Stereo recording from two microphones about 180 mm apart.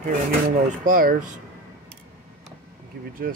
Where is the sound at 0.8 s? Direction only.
50° right (ahead or behind).